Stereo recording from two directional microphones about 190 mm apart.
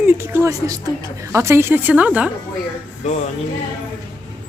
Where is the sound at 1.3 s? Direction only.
15° right (ahead or behind).